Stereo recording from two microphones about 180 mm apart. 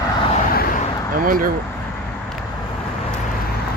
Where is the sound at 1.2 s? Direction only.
50° right (ahead or behind).